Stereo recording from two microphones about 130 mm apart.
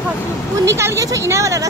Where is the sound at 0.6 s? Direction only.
25° right (ahead or behind).